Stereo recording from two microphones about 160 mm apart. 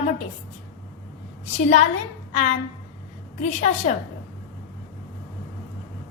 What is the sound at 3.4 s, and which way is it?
Speech, 45° left (ahead or behind).